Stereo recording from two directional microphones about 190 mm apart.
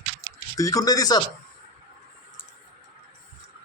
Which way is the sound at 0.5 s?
15° left (ahead or behind).